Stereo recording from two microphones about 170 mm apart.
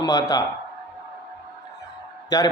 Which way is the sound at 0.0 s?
20° left (ahead or behind).